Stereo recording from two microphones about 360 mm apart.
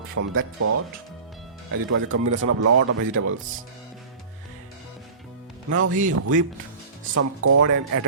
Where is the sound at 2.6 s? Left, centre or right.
Right.